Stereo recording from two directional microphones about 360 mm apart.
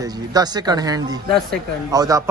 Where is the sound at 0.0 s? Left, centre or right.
Centre.